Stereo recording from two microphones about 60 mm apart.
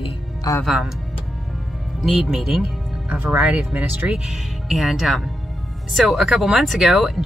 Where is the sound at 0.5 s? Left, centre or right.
Left.